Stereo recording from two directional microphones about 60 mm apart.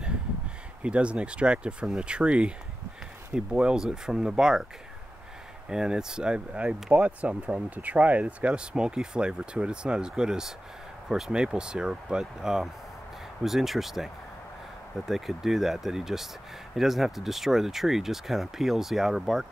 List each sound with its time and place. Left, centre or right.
0.8 s speech: centre
5.7 s speech: centre